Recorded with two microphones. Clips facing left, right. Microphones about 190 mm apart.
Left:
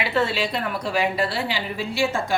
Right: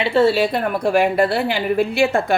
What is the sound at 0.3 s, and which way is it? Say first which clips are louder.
Speech: right 8 dB; 50° right (ahead or behind).